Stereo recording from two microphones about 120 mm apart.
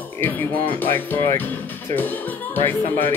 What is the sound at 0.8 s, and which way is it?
Speech, 15° left (ahead or behind).